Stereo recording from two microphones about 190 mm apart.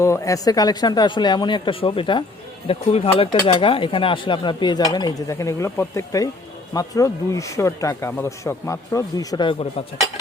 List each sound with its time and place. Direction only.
0.0 s speech: 15° left (ahead or behind); by 10.1 s 30° left (ahead or behind)